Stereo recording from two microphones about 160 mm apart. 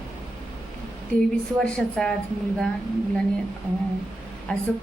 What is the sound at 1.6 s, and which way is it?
Speech, 5° left (ahead or behind).